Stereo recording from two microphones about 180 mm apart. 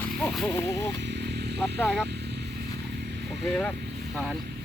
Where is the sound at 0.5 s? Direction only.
15° left (ahead or behind).